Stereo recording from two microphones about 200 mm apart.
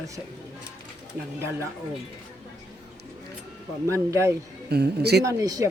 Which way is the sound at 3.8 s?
15° right (ahead or behind).